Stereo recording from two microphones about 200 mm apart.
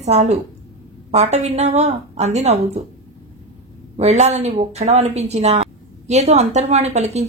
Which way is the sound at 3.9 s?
35° right (ahead or behind).